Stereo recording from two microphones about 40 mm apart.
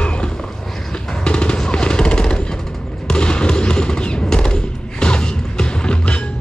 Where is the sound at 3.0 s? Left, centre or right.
Left.